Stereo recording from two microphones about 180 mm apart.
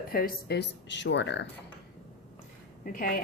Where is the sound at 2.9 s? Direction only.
50° left (ahead or behind).